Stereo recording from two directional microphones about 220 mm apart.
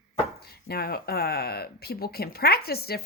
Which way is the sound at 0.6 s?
45° left (ahead or behind).